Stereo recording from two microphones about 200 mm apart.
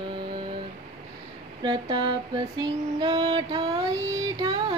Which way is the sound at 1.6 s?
20° right (ahead or behind).